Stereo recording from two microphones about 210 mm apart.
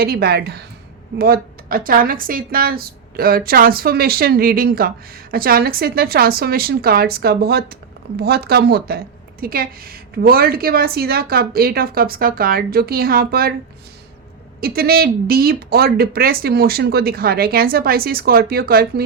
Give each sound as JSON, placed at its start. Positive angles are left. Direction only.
{"t": 0.0, "sound": "a woman's voice", "side_deg": -50}
{"t": 14.6, "sound": "a woman's voice", "side_deg": -45}